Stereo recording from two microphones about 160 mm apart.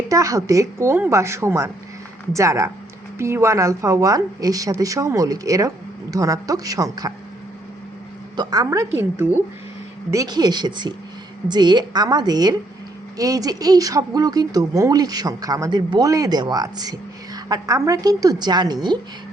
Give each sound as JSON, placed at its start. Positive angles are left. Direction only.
{"t": 0.1, "sound": "speech", "side_deg": -20}
{"t": 8.4, "sound": "speech", "side_deg": -25}